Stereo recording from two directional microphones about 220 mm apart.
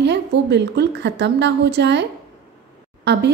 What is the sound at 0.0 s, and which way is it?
A woman's voice, 50° right (ahead or behind).